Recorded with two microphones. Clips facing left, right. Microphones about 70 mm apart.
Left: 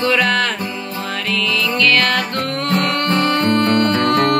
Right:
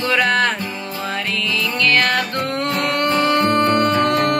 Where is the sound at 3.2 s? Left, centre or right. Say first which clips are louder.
Right 1 dB; centre.